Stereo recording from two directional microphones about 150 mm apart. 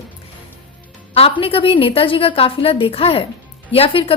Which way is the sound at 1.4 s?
35° left (ahead or behind).